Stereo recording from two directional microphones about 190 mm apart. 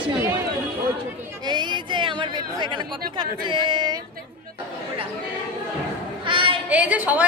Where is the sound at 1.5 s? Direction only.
25° right (ahead or behind).